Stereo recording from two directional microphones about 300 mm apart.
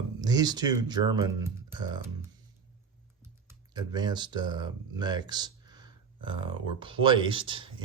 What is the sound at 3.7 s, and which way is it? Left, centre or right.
Speech, centre.